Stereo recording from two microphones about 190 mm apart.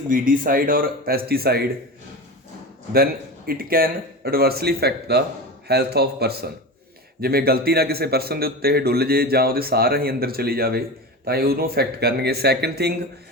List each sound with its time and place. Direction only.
0.1 s a man's voice: 50° right (ahead or behind)
2.9 s a man's voice: 50° right (ahead or behind)